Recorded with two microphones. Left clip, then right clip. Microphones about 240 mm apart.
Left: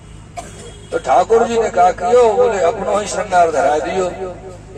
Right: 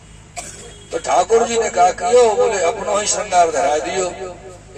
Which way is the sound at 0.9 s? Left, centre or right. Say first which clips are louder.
Left 2 dB; right.